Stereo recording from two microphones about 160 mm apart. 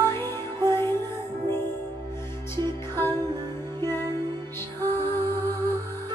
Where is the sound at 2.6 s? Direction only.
15° left (ahead or behind).